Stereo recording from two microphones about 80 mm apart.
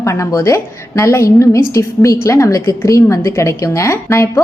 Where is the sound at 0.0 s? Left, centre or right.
Left.